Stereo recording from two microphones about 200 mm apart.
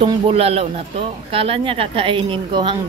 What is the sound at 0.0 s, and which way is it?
Speech, 30° right (ahead or behind).